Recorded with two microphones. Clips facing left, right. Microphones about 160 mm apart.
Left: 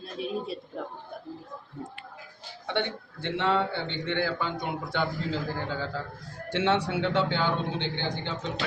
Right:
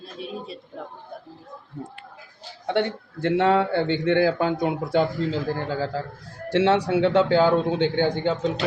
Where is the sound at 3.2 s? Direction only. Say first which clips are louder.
Right 7 dB; 45° right (ahead or behind).